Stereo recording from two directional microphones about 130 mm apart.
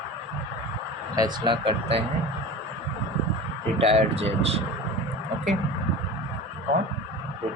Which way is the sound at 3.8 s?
50° right (ahead or behind).